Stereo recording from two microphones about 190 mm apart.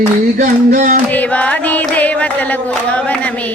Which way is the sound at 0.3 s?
50° right (ahead or behind).